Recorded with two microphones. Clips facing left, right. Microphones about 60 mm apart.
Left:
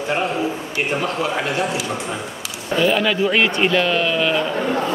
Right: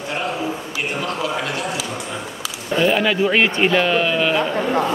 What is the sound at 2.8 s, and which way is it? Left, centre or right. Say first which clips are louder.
A man's voice: even; centre.